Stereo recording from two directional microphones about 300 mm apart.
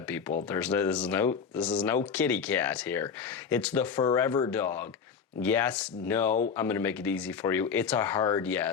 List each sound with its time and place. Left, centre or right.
0.4 s speech: centre